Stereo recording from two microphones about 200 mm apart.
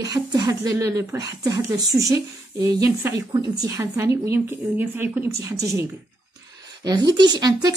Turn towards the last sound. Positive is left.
turn(degrees=-20)  # may be behind; listen again after turning